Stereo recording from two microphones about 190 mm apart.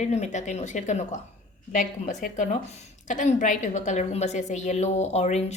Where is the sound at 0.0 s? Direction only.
40° left (ahead or behind).